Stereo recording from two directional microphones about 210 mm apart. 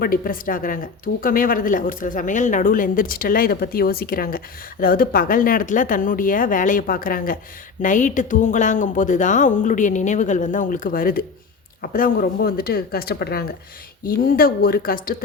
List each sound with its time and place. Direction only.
0.0 s speech: 45° left (ahead or behind)